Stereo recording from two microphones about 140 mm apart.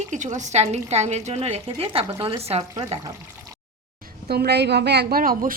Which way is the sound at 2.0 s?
35° right (ahead or behind).